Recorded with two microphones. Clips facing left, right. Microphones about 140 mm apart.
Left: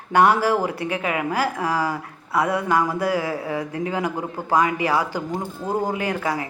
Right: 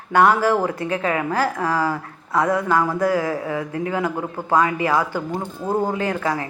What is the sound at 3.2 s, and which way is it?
A woman's voice, 25° left (ahead or behind).